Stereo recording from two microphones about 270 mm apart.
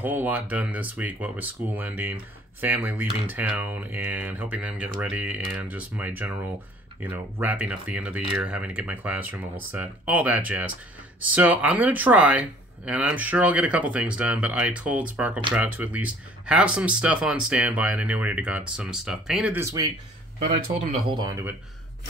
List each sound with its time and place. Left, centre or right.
0.0 s speech: centre
20.4 s speech: right
21.1 s speech: centre